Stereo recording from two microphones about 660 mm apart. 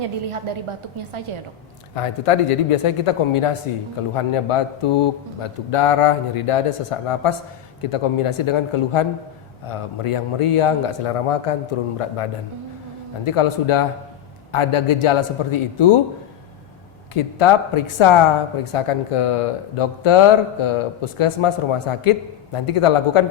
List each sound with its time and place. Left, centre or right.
0.3 s a woman's voice: right
2.0 s speech: left
17.2 s speech: left